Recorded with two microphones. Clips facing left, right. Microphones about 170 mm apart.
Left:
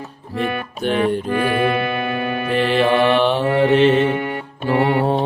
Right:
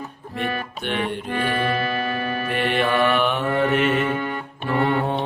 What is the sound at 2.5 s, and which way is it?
Mantra, 35° left (ahead or behind).